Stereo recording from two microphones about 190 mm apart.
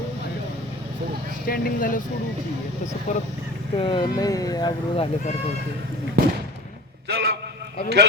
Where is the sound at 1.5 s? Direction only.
45° left (ahead or behind).